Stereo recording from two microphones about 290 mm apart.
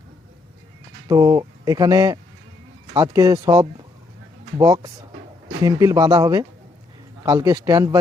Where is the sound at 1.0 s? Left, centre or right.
Centre.